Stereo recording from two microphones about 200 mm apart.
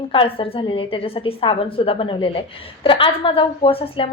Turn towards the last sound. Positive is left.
turn(degrees=30)  # may be behind; listen again after turning